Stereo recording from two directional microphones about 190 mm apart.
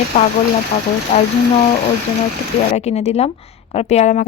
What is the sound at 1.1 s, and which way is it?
Speech, 35° left (ahead or behind).